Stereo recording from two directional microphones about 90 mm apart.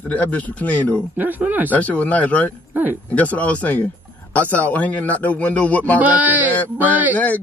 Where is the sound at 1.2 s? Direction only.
20° right (ahead or behind).